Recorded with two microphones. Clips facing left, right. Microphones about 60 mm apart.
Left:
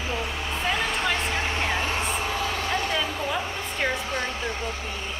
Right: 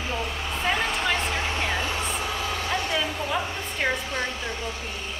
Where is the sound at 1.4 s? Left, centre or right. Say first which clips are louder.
Left 1 dB; centre.